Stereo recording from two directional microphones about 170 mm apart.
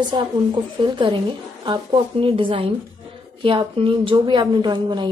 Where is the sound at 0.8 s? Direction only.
25° right (ahead or behind).